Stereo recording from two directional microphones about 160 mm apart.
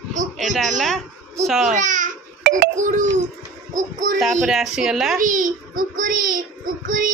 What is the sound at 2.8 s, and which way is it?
Speech, 50° right (ahead or behind).